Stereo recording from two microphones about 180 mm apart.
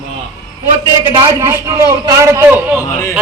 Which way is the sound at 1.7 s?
15° right (ahead or behind).